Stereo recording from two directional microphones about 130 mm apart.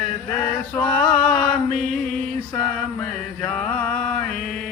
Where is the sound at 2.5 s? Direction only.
10° left (ahead or behind).